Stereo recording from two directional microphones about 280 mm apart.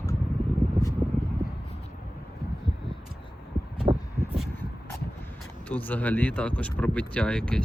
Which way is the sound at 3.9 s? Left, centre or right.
Right.